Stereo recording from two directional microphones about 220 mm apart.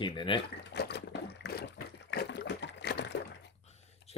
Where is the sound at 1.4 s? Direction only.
45° left (ahead or behind).